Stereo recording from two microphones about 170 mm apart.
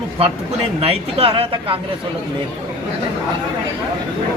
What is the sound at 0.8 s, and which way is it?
Speech, 35° right (ahead or behind).